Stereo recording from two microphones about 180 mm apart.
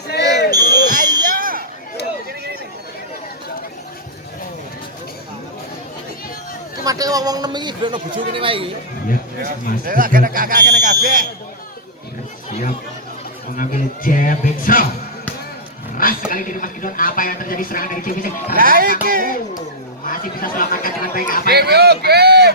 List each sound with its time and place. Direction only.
0.2 s basketball bounce: 20° right (ahead or behind)
0.6 s smoke detector: 55° left (ahead or behind)
1.2 s a sound: 50° right (ahead or behind)
6.8 s a man's voice: 20° right (ahead or behind)
9.8 s speech: 50° right (ahead or behind)
12.5 s speech: 40° left (ahead or behind)
13.6 s speech: 50° left (ahead or behind)
16.0 s a sound: 50° left (ahead or behind)
16.3 s speech: 50° left (ahead or behind)
18.5 s speech: 55° right (ahead or behind)
20.1 s speech: 50° left (ahead or behind)
21.4 s speech: 65° right (ahead or behind)